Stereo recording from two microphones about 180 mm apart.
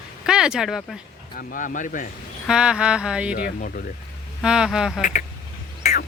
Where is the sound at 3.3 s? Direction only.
55° left (ahead or behind).